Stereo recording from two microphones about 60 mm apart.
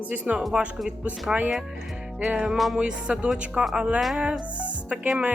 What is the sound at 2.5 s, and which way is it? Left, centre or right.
Music, centre.